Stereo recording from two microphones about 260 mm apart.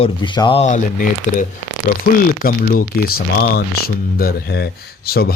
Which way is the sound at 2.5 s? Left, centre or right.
Left.